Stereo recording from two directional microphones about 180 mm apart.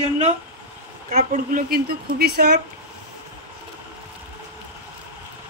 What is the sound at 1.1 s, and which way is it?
A woman's voice, 50° right (ahead or behind).